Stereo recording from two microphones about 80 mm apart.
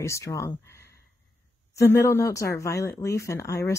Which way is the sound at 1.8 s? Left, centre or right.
Left.